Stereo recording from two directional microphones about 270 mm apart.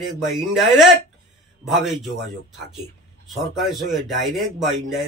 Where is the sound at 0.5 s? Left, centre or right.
Centre.